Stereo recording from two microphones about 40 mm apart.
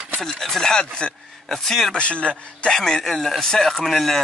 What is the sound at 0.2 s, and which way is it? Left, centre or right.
Speech, centre.